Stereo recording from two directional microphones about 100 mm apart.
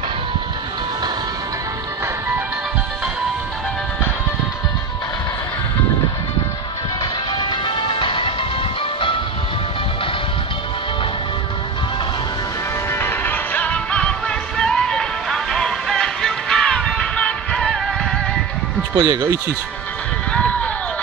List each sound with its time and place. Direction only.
7.3 s music: 55° left (ahead or behind)
12.9 s music: 20° left (ahead or behind)
18.9 s speech: 55° right (ahead or behind)
20.3 s run: 15° left (ahead or behind)